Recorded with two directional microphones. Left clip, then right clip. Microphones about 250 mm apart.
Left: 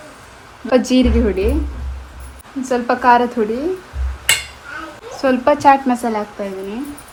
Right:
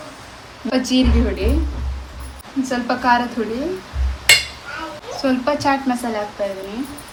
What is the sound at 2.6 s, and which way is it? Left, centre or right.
Speech, left.